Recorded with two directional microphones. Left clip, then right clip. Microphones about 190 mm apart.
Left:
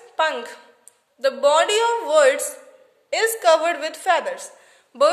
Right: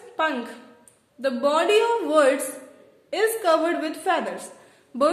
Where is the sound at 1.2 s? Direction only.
40° left (ahead or behind).